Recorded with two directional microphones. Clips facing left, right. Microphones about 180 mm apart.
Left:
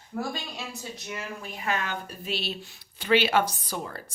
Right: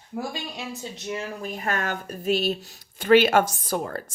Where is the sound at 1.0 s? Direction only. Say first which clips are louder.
Right 7 dB; 30° right (ahead or behind).